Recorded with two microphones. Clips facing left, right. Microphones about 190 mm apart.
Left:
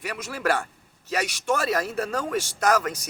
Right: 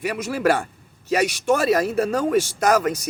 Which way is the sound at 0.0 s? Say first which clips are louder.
Right 7 dB; 10° right (ahead or behind).